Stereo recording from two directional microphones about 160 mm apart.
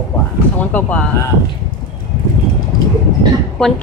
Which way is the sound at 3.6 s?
Centre (ahead or behind).